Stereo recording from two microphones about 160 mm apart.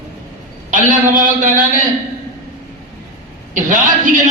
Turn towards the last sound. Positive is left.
turn(degrees=-55)  # may be behind; listen again after turning